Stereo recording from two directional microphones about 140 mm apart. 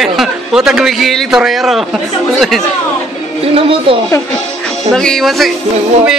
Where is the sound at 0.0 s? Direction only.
5° right (ahead or behind).